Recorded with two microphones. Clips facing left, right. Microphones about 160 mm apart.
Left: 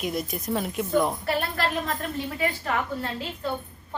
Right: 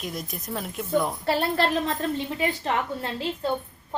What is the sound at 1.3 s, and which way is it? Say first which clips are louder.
A woman's voice: right 3 dB; 30° right (ahead or behind).